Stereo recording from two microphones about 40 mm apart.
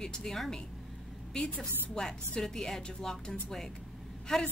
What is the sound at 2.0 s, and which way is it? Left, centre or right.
A woman's voice, centre.